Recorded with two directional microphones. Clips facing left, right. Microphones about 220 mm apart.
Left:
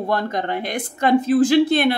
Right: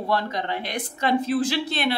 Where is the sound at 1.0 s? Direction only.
50° left (ahead or behind).